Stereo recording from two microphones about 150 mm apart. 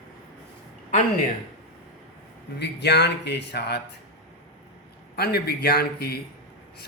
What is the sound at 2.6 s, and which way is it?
Speech, 90° left.